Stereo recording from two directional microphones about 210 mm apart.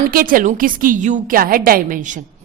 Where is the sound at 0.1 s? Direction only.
45° right (ahead or behind).